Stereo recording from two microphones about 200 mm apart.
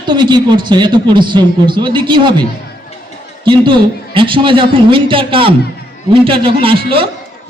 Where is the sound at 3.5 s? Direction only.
25° right (ahead or behind).